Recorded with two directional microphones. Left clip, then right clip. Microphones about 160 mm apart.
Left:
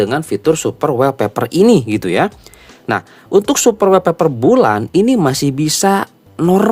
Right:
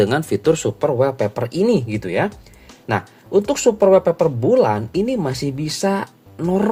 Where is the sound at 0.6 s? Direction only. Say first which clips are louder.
Left 4 dB; 40° left (ahead or behind).